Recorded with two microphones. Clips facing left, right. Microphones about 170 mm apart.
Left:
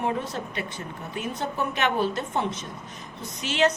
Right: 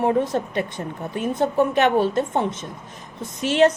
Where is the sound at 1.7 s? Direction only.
50° right (ahead or behind).